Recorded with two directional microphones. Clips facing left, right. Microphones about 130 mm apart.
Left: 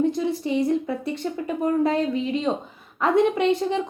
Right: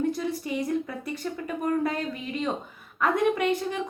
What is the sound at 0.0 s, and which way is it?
A woman's voice, 25° left (ahead or behind).